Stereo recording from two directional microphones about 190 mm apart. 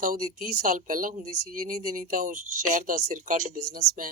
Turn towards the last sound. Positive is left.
turn(degrees=-35)  # may be behind; listen again after turning